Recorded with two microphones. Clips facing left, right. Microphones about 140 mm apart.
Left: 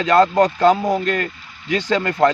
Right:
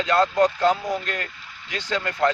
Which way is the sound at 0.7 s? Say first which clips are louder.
Left 7 dB; 65° left (ahead or behind).